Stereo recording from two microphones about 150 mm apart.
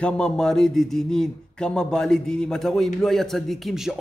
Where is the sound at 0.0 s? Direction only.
5° left (ahead or behind).